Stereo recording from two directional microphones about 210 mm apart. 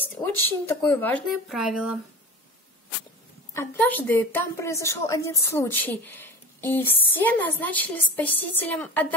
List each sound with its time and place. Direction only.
0.7 s speech: 10° left (ahead or behind)
3.5 s a woman's voice: 10° left (ahead or behind)